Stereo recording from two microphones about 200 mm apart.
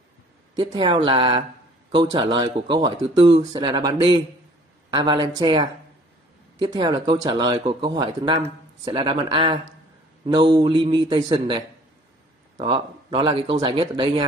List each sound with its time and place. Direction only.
0.6 s speech: 20° right (ahead or behind)